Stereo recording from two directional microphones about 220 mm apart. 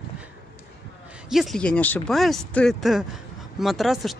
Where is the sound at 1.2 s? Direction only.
Centre (ahead or behind).